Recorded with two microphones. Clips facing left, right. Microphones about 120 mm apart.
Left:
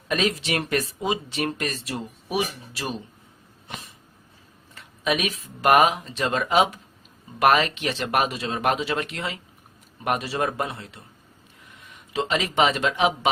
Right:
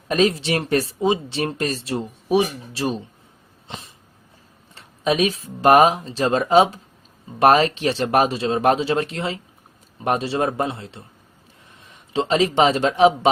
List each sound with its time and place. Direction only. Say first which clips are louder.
0.1 s speech: right 6 dB; 35° right (ahead or behind)
3.7 s a sound: right 2 dB; 25° right (ahead or behind)
4.7 s speech: right 4 dB; 30° right (ahead or behind)